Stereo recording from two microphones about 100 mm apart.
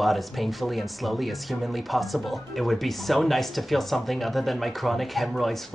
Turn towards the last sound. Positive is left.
turn(degrees=0)  # may be behind; listen again after turning